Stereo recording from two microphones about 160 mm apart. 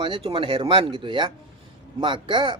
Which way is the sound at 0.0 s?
35° right (ahead or behind).